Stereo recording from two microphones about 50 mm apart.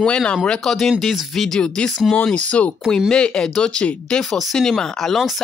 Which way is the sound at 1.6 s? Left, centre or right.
Centre.